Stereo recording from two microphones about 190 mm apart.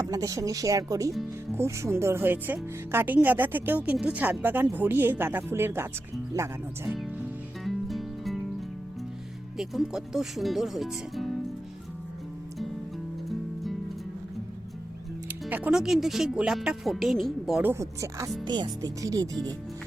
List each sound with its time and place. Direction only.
0.0 s speech: 20° right (ahead or behind)
7.6 s music: centre (ahead or behind)
9.6 s speech: centre (ahead or behind)
15.3 s speech: 10° right (ahead or behind)